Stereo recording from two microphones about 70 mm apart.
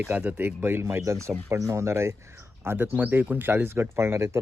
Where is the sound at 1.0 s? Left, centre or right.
Right.